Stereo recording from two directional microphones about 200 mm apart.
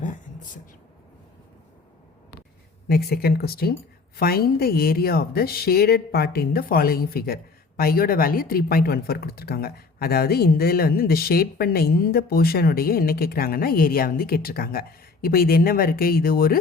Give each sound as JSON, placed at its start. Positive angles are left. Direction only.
{"t": 2.9, "sound": "speech", "side_deg": 50}